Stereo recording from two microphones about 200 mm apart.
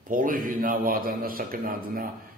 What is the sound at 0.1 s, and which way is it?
A man's voice, 45° right (ahead or behind).